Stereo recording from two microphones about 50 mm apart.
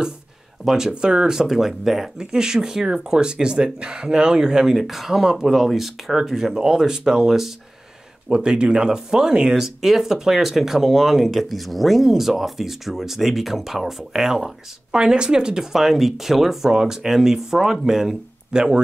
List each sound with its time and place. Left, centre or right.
0.7 s speech: centre
8.3 s speech: centre